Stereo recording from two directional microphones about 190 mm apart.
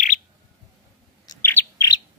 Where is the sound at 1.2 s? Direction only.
15° left (ahead or behind).